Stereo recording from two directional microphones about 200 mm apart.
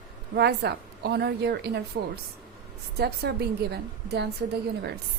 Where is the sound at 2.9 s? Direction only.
55° right (ahead or behind).